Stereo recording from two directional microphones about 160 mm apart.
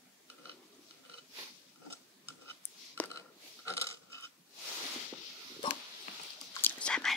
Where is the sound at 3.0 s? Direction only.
10° left (ahead or behind).